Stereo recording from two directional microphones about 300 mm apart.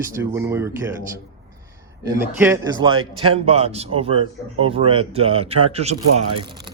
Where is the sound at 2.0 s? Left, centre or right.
Centre.